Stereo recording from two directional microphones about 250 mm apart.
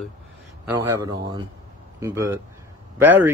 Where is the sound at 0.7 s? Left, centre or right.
Centre.